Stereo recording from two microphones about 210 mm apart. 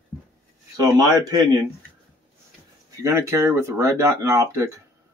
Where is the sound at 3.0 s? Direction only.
15° right (ahead or behind).